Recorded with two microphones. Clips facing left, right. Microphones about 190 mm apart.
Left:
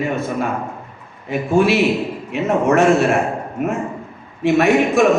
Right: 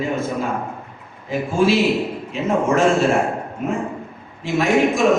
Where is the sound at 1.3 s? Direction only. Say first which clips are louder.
Left 2 dB; 65° left (ahead or behind).